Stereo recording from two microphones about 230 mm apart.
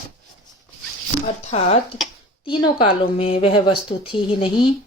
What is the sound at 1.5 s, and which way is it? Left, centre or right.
Speech, left.